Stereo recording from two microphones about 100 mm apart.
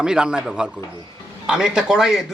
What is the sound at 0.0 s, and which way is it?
Speech, 5° right (ahead or behind).